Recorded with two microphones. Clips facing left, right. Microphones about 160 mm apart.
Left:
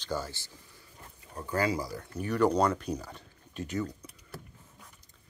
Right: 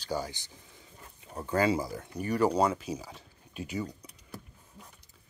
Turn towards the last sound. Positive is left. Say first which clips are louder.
# left 2 dB
turn(degrees=-10)  # may be behind; listen again after turning